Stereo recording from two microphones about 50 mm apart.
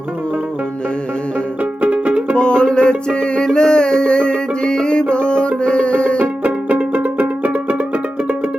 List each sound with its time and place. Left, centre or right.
1.8 s music: right
2.3 s music: centre
6.4 s music: right